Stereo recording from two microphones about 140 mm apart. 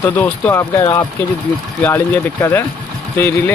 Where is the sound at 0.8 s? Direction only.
25° left (ahead or behind).